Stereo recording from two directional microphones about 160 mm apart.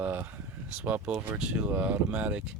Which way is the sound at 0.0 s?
10° right (ahead or behind).